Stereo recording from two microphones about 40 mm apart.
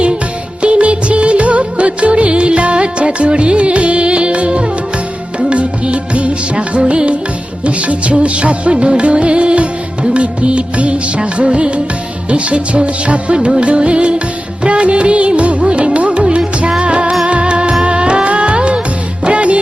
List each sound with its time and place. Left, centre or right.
0.6 s music: right
7.6 s music of bollywood: right
12.3 s music: right